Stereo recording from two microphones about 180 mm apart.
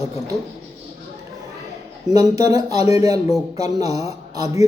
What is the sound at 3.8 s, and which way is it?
Speech, 35° left (ahead or behind).